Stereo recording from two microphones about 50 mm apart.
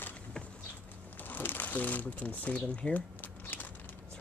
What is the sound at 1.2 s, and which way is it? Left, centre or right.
Speech, left.